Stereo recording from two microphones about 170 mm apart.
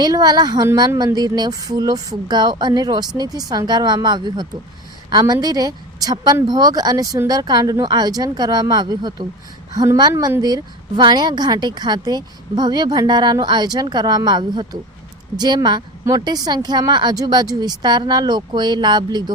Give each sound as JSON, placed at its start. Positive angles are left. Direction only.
{"t": 0.0, "sound": "a woman's voice", "side_deg": -25}